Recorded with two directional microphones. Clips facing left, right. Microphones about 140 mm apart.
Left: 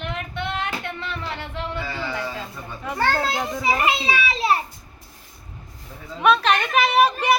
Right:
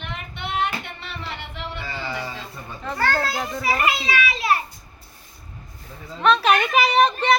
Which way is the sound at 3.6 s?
25° left (ahead or behind).